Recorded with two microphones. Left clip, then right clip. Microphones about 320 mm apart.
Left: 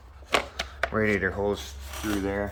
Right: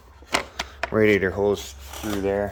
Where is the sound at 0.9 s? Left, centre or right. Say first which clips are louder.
Right 8 dB; right.